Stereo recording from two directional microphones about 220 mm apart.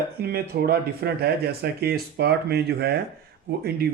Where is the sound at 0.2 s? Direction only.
45° right (ahead or behind).